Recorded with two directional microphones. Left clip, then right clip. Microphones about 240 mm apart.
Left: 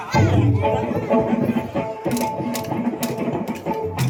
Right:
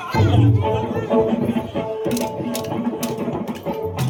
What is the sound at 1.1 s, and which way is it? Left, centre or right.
Music, centre.